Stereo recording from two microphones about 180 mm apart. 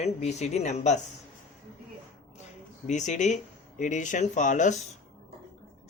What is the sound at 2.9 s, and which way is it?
Speech, 40° left (ahead or behind).